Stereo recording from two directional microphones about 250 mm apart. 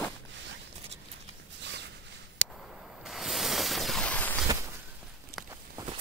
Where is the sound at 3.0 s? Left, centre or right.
Centre.